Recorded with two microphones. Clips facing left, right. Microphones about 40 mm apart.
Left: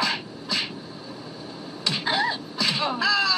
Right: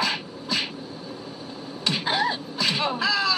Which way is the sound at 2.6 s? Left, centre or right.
Centre.